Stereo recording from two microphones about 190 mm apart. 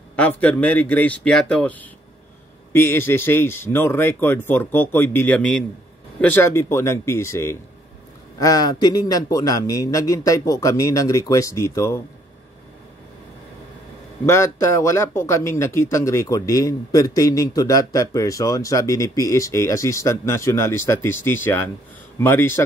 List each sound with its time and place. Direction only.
0.1 s speech: 5° left (ahead or behind)
14.2 s speech: 15° left (ahead or behind)